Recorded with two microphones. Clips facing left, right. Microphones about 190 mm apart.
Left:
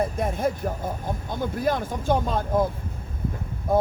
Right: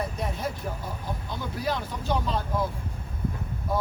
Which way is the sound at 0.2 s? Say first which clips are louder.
Left 7 dB; 50° left (ahead or behind).